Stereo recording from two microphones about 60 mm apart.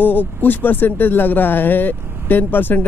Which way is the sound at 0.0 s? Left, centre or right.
Left.